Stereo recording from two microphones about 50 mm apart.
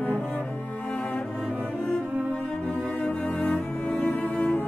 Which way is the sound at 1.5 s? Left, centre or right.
Right.